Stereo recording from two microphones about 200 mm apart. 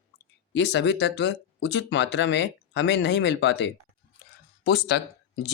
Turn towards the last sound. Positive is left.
turn(degrees=55)  # may be behind; listen again after turning